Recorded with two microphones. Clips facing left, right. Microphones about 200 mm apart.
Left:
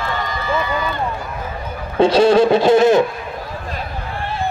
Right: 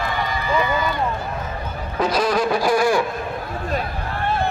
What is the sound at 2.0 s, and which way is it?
Speech, 25° left (ahead or behind).